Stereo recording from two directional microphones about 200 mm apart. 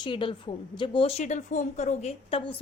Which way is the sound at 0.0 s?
25° left (ahead or behind).